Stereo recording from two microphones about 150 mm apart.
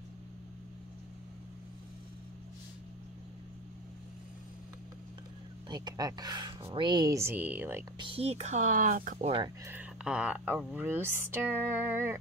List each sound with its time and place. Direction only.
5.7 s speech: 25° right (ahead or behind); by 7.8 s 10° right (ahead or behind)
8.0 s speech: 40° right (ahead or behind); by 9.3 s 65° right (ahead or behind)
9.7 s speech: 10° right (ahead or behind)